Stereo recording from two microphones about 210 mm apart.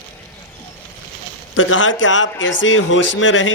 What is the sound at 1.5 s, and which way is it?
Speech, 65° left (ahead or behind).